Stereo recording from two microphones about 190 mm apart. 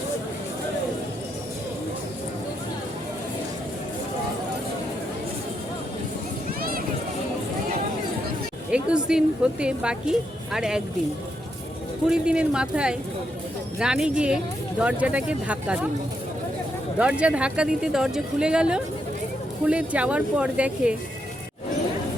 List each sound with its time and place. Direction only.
6.6 s a sound: 50° right (ahead or behind)
8.7 s a woman's voice: 5° right (ahead or behind)
12.0 s a woman's voice: 5° right (ahead or behind)
17.0 s a woman's voice: 5° right (ahead or behind)